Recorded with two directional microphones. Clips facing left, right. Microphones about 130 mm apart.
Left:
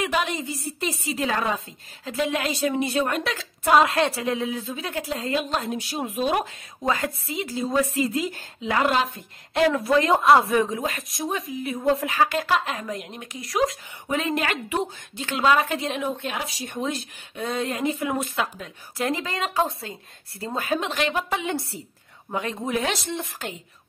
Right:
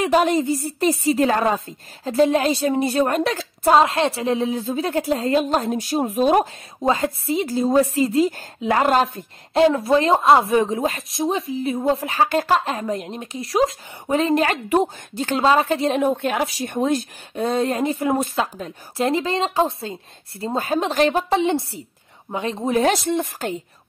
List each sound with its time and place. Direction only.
0.0 s a woman's voice: 40° right (ahead or behind)
9.5 s a woman's voice: 30° right (ahead or behind)
22.9 s a woman's voice: 50° right (ahead or behind)